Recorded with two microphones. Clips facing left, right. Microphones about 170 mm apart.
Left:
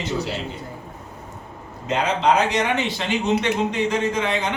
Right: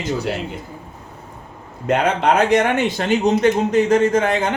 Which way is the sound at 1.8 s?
55° right (ahead or behind).